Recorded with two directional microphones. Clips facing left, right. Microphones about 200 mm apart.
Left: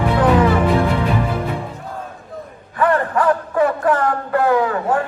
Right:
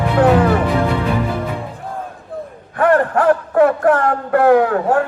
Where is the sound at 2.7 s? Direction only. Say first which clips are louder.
Right 3 dB; 60° right (ahead or behind).